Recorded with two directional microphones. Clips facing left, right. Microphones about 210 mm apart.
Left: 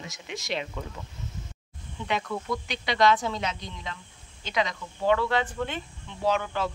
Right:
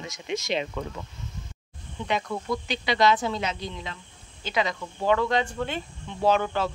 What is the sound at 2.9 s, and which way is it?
Speech, 5° right (ahead or behind).